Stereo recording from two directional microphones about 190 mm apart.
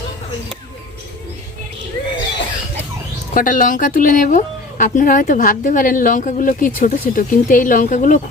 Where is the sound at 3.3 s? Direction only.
45° left (ahead or behind).